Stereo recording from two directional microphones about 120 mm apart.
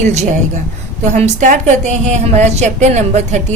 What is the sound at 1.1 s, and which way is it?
A woman's voice, 90° right.